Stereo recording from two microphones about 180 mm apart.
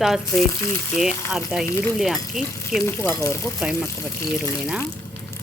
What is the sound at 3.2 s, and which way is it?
Speech, 15° left (ahead or behind).